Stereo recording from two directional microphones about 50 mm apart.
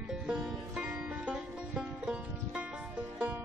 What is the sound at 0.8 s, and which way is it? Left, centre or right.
Music, centre.